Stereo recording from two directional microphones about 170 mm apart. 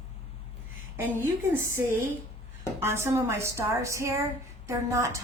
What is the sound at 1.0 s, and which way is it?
Speech, 10° right (ahead or behind).